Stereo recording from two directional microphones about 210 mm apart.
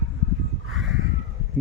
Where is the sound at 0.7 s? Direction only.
Centre (ahead or behind).